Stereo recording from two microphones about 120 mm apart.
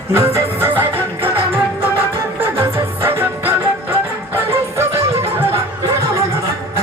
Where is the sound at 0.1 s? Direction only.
25° right (ahead or behind).